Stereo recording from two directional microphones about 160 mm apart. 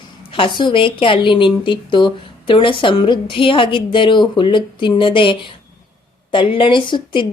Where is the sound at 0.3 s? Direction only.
30° left (ahead or behind).